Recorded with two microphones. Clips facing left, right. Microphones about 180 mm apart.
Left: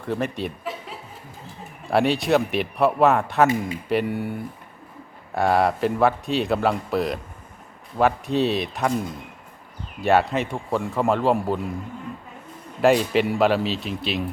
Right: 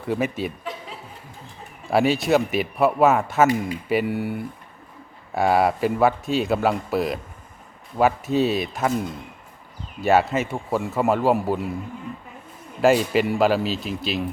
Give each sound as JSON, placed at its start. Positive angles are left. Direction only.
{"t": 0.0, "sound": "speech", "side_deg": -5}
{"t": 12.8, "sound": "speech", "side_deg": 0}